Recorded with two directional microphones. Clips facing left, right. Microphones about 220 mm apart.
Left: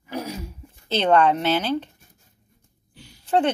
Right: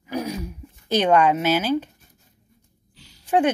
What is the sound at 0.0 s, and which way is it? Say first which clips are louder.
Throat clearing: right 3 dB; 15° right (ahead or behind).